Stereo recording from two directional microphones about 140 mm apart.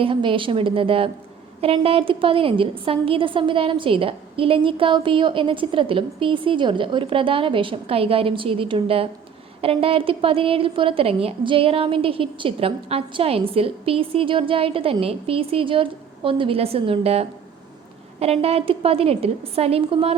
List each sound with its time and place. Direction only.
0.0 s a woman's voice: 35° right (ahead or behind)